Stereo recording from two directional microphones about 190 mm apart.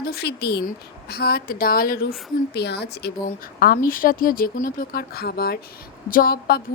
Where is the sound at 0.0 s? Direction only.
55° left (ahead or behind).